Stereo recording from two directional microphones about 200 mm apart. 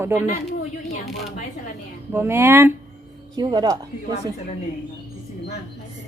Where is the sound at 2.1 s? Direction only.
10° right (ahead or behind).